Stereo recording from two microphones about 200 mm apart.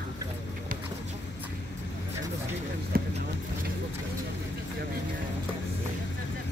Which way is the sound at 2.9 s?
45° right (ahead or behind).